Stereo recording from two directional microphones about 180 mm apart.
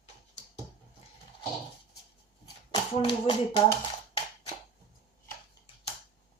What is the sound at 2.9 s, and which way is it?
Speech, 30° left (ahead or behind).